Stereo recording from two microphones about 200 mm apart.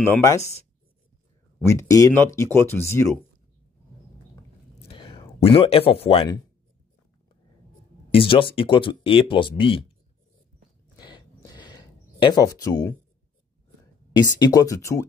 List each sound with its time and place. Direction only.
0.0 s speech: 15° left (ahead or behind)
1.7 s speech: 15° left (ahead or behind)
4.8 s speech: 25° left (ahead or behind)
8.1 s speech: 25° left (ahead or behind)
11.0 s a sound: 20° left (ahead or behind)
14.4 s speech: 15° left (ahead or behind)